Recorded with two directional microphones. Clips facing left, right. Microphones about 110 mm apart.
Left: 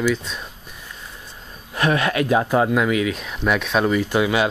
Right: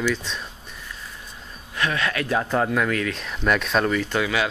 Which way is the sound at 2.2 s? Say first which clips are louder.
Left 4 dB; 10° left (ahead or behind).